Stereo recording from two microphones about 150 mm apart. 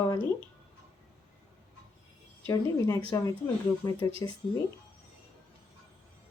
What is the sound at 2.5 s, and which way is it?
Speech, 25° left (ahead or behind).